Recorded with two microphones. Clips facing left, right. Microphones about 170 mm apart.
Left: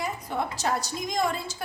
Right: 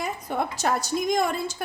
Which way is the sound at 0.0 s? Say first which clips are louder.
Right 2 dB; 50° right (ahead or behind).